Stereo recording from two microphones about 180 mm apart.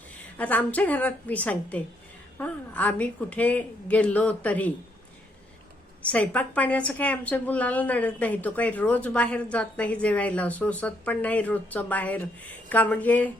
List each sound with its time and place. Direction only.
0.3 s a woman's voice: 10° left (ahead or behind)
6.0 s a woman's voice: 10° left (ahead or behind)